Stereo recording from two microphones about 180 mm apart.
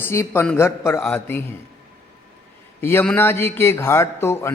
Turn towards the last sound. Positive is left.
turn(degrees=15)  # may be behind; listen again after turning